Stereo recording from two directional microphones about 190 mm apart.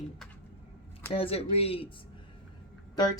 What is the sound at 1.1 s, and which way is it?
Speech, 30° left (ahead or behind).